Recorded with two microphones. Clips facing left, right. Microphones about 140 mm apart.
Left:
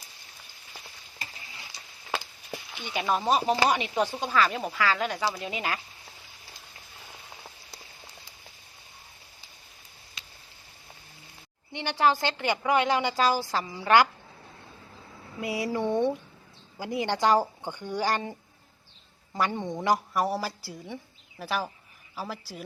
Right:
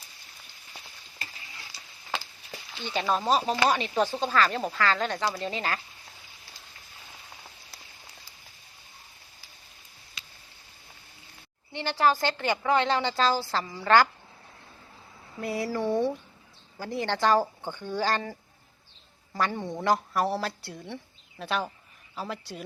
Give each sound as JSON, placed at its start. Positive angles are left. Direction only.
{"t": 1.7, "sound": "a sound", "side_deg": 20}
{"t": 2.1, "sound": "chop", "side_deg": 10}
{"t": 3.7, "sound": "a woman's voice", "side_deg": 15}
{"t": 11.7, "sound": "a woman's voice", "side_deg": 15}
{"t": 15.4, "sound": "a woman's voice", "side_deg": 15}